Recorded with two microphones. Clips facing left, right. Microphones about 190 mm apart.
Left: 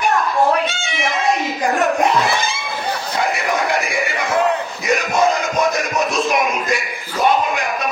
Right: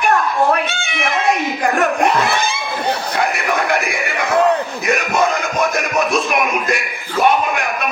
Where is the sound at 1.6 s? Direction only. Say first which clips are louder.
Left 1 dB; 60° right (ahead or behind).